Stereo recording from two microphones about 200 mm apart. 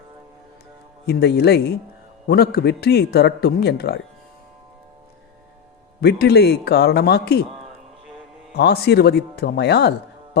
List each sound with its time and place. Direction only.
1.0 s a man's voice: 55° left (ahead or behind)
6.0 s a man's voice: 55° left (ahead or behind)
8.5 s a man's voice: 55° left (ahead or behind)